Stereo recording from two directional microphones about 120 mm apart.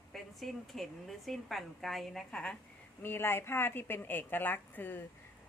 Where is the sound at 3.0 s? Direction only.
20° left (ahead or behind).